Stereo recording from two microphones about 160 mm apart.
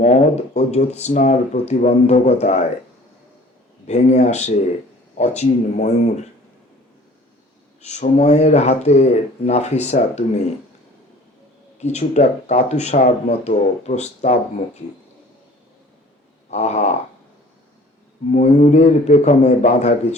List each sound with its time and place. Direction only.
0.0 s speech: 45° left (ahead or behind)
3.8 s speech: 45° left (ahead or behind)
7.8 s speech: 45° left (ahead or behind)
11.8 s speech: 45° left (ahead or behind)
16.5 s speech: 45° left (ahead or behind)
18.3 s speech: 45° left (ahead or behind)